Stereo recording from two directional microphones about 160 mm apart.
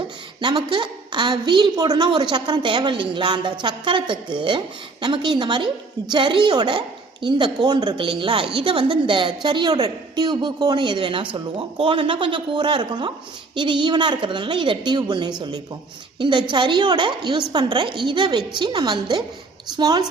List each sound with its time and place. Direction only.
0.4 s a woman's voice: 30° right (ahead or behind)